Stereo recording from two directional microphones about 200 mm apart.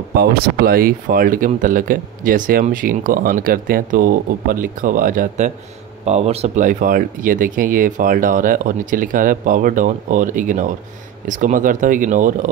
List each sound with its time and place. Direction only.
0.1 s speech: 50° right (ahead or behind)